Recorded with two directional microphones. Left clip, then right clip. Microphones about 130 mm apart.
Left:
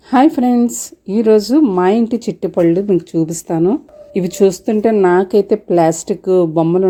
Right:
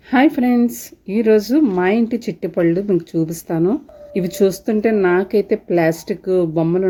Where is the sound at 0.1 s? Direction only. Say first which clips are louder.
Left 3 dB; 10° left (ahead or behind).